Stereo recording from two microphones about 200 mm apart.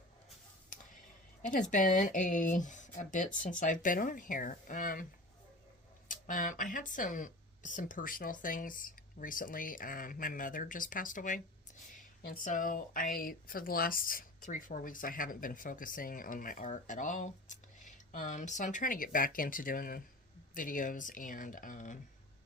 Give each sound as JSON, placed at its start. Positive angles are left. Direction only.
{"t": 0.7, "sound": "a sound", "side_deg": 40}
{"t": 1.4, "sound": "a woman's voice", "side_deg": 40}
{"t": 6.1, "sound": "speech", "side_deg": 40}